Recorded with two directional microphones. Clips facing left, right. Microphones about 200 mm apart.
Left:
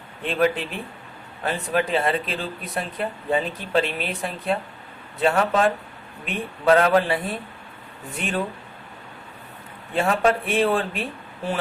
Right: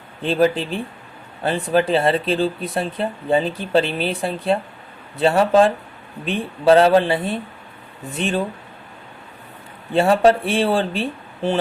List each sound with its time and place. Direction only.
0.2 s speech: 35° right (ahead or behind)
9.9 s speech: 30° right (ahead or behind)